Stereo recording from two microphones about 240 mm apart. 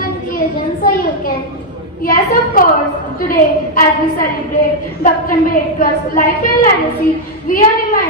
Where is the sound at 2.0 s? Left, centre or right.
Left.